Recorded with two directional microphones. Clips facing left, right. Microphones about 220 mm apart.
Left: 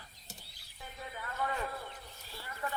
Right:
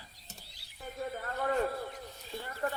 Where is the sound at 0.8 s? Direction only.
45° right (ahead or behind).